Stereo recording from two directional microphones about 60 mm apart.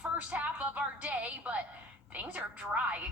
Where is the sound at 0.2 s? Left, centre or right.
Right.